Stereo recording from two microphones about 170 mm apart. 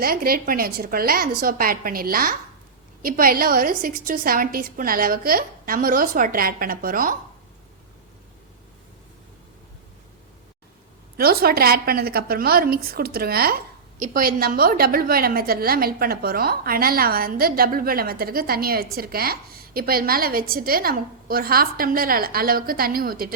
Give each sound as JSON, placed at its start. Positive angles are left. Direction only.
{"t": 0.0, "sound": "a woman's voice", "side_deg": -60}
{"t": 11.2, "sound": "a woman's voice", "side_deg": -65}